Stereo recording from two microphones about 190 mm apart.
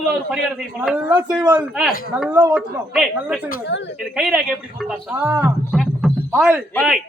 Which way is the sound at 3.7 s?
70° left (ahead or behind).